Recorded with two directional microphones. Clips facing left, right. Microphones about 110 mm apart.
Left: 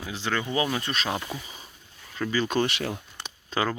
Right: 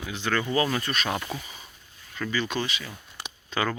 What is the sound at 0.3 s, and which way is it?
Speech, 15° left (ahead or behind).